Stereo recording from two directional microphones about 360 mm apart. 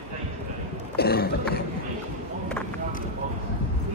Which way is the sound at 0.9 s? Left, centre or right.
Left.